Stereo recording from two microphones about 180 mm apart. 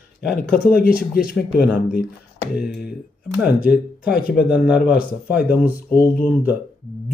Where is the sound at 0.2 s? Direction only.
65° left (ahead or behind).